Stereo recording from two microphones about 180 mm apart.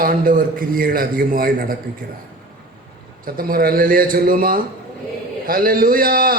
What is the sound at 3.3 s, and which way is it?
A woman's voice, 55° right (ahead or behind).